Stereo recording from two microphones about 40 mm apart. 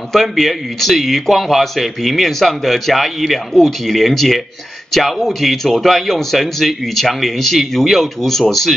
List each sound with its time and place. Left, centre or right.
0.1 s a man's voice: centre